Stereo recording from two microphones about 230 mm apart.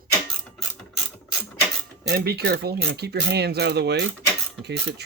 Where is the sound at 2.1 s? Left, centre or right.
Right.